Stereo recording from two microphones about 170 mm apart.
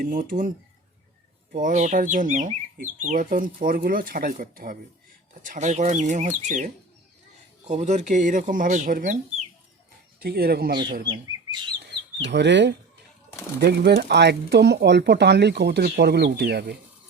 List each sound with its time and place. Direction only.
0.0 s speech: 55° right (ahead or behind)
1.5 s speech: 50° right (ahead or behind)
7.7 s speech: 45° right (ahead or behind)
10.2 s speech: 65° right (ahead or behind)
10.7 s speech: 25° right (ahead or behind)
11.8 s chicken: 85° right
13.6 s speech: 70° right (ahead or behind)